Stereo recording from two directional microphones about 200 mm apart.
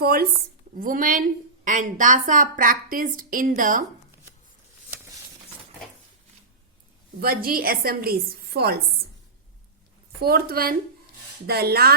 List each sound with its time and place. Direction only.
0.0 s a woman's voice: 50° right (ahead or behind)
7.2 s a woman's voice: 50° right (ahead or behind)
10.2 s a woman's voice: 50° right (ahead or behind)